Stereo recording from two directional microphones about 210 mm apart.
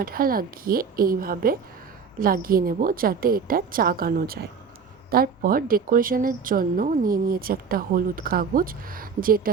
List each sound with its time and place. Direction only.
0.0 s a woman's voice: 45° right (ahead or behind)